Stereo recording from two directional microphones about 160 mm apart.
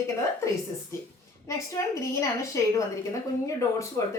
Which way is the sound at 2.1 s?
20° left (ahead or behind).